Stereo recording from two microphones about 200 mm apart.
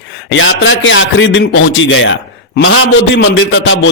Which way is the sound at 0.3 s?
70° left (ahead or behind).